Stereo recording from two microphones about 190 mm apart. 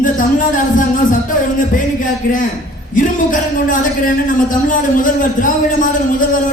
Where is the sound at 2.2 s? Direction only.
50° left (ahead or behind).